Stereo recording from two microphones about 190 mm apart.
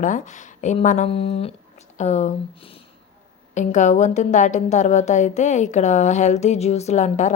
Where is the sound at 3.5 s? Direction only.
40° left (ahead or behind).